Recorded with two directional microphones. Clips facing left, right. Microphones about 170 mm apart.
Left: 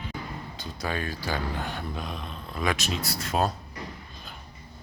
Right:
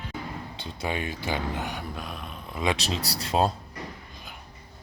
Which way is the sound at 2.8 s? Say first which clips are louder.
Right 1 dB; 35° right (ahead or behind).